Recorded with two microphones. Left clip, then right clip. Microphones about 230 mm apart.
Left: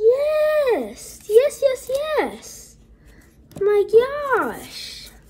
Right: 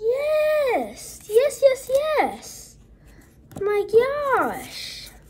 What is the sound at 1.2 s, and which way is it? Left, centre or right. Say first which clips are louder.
A child's voice: left 1 dB; centre.